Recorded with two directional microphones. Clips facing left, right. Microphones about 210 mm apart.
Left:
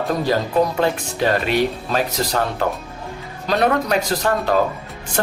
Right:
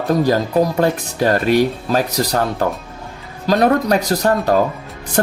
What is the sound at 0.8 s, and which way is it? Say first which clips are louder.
Speech: right 3 dB; 45° right (ahead or behind).